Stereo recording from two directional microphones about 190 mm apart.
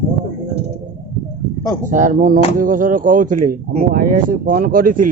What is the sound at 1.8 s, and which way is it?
A man's voice, 45° right (ahead or behind).